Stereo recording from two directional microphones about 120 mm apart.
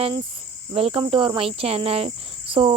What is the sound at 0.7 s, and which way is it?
Cricket, 50° right (ahead or behind).